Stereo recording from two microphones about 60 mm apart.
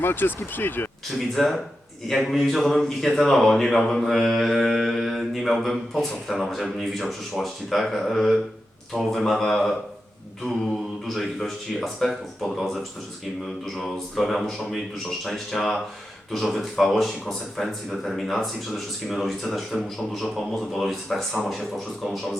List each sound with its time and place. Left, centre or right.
0.0 s speech: left
1.1 s mantra: centre
11.0 s mantra: centre